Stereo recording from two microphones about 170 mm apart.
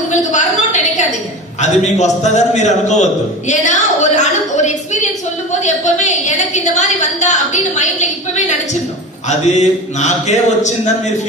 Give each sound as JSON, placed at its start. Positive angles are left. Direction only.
{"t": 0.1, "sound": "a sound", "side_deg": 45}
{"t": 1.6, "sound": "a woman's voice", "side_deg": 45}
{"t": 9.6, "sound": "a woman's voice", "side_deg": 45}